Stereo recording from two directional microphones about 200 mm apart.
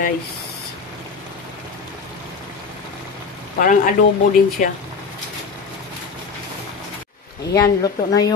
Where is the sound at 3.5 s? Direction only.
40° left (ahead or behind).